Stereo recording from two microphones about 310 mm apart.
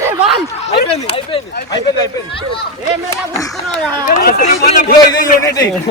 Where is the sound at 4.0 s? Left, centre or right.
Left.